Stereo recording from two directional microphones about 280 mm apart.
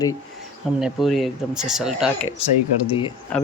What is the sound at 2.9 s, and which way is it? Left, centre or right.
Speech, centre.